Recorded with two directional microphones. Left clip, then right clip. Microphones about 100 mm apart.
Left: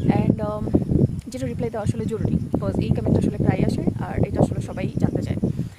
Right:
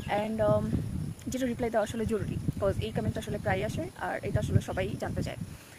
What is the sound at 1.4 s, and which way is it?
Speech, 35° left (ahead or behind).